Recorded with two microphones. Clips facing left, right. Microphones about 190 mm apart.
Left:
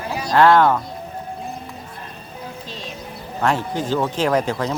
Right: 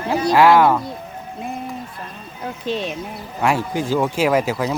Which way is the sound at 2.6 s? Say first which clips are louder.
Right 11 dB; 65° right (ahead or behind).